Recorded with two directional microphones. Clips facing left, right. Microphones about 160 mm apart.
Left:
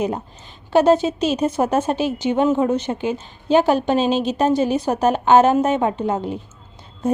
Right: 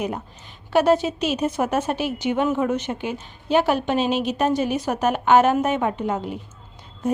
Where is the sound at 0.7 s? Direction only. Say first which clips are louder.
Left 3 dB; 25° left (ahead or behind).